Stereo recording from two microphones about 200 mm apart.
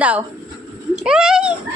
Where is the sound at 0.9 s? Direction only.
5° right (ahead or behind).